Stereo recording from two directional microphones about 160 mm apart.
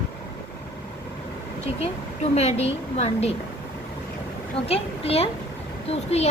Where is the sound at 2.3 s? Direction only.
40° left (ahead or behind).